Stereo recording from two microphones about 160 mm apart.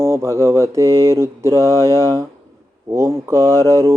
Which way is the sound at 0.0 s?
15° right (ahead or behind).